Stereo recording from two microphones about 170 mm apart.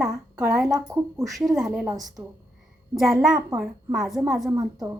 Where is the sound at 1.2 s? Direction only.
Centre (ahead or behind).